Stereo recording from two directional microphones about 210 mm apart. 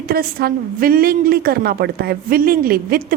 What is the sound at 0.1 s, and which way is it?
Speech, 45° right (ahead or behind).